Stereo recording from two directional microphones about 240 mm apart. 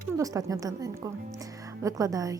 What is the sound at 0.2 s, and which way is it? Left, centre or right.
A woman's voice, centre.